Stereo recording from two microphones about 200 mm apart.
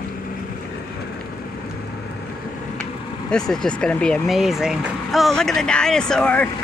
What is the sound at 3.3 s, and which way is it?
Speech, 5° left (ahead or behind).